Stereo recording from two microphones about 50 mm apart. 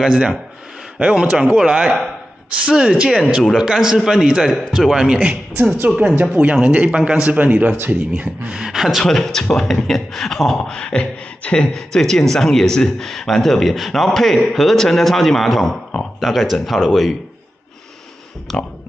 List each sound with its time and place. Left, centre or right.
0.0 s speech: centre
7.3 s a man's voice: right
8.5 s speech: centre
9.0 s speech: centre
10.6 s beatboxing: centre
11.7 s speech: centre
18.5 s speech: centre